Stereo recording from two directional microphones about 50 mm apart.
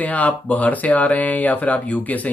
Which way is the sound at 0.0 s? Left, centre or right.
Left.